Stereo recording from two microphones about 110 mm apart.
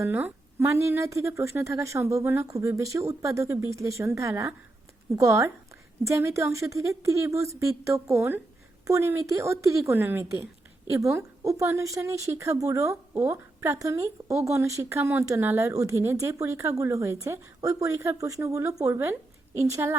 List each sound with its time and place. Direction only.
0.0 s a woman's voice: 15° right (ahead or behind)